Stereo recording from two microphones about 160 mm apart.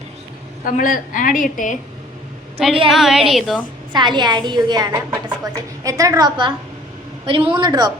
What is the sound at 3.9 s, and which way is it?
A woman's voice, 30° right (ahead or behind).